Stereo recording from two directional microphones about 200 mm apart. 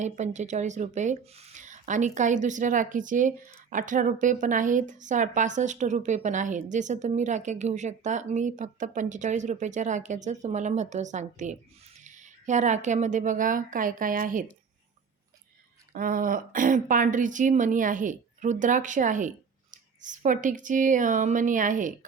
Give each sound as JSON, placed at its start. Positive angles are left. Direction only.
{"t": 0.0, "sound": "speech", "side_deg": -35}
{"t": 15.9, "sound": "speech", "side_deg": -45}